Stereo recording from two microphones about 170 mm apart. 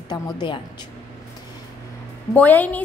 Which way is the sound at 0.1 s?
25° left (ahead or behind).